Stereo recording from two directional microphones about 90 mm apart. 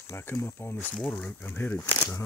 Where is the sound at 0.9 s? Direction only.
15° left (ahead or behind).